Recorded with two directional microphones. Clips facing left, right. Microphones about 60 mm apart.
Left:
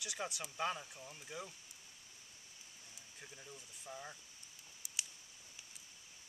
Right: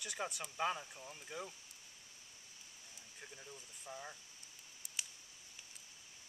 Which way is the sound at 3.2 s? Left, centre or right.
Centre.